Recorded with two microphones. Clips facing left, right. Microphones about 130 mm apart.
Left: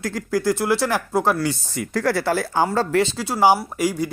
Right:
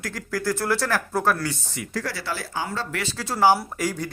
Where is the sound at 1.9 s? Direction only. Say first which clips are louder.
Left 10 dB; 55° left (ahead or behind).